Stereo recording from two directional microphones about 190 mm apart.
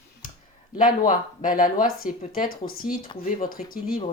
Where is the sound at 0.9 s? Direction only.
45° left (ahead or behind).